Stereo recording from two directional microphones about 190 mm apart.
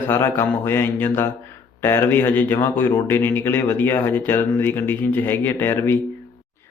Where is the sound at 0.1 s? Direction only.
15° left (ahead or behind).